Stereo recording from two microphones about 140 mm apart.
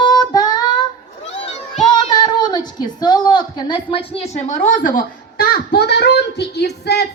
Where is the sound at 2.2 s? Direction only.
30° left (ahead or behind); by 5.5 s 85° left.